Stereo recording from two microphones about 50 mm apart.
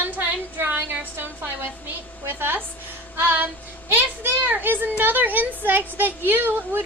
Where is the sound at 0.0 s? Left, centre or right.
Right.